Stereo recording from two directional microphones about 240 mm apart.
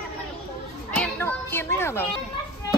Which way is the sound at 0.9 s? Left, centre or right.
Centre.